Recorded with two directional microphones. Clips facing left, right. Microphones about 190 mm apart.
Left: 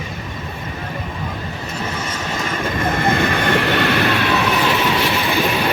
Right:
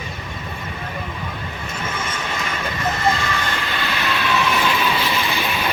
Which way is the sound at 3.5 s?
65° left (ahead or behind).